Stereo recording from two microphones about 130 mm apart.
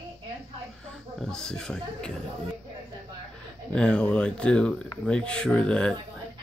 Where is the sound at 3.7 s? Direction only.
10° left (ahead or behind).